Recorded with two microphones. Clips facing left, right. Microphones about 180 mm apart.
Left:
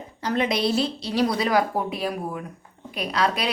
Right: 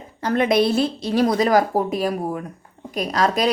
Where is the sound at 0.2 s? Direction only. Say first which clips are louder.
Right 6 dB; 50° right (ahead or behind).